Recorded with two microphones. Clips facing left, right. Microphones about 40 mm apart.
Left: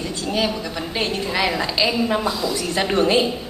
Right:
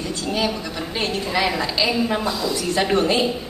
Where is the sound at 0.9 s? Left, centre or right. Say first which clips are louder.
Left 1 dB; centre.